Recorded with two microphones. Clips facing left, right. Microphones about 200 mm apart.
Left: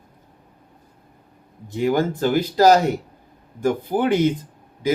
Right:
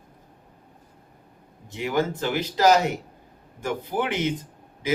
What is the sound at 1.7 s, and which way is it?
Speech, 35° left (ahead or behind).